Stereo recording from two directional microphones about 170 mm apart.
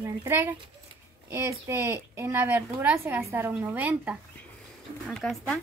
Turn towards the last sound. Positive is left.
turn(degrees=5)  # may be behind; listen again after turning